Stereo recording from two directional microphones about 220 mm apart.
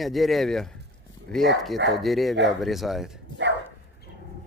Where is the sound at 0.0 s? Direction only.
Centre (ahead or behind).